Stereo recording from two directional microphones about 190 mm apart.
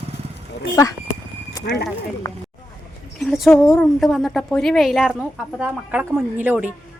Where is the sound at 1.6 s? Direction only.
60° left (ahead or behind).